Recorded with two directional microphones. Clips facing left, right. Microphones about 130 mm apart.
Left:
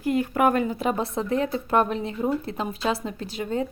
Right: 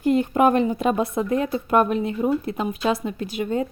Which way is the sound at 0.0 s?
25° right (ahead or behind).